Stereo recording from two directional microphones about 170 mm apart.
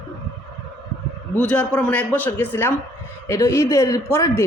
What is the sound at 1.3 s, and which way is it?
A woman's voice, 5° left (ahead or behind).